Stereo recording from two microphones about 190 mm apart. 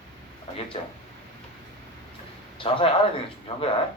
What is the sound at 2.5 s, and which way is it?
Speech, 30° left (ahead or behind).